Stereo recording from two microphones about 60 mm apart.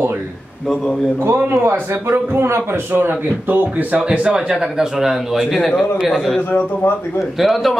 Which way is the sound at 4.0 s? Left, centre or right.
Centre.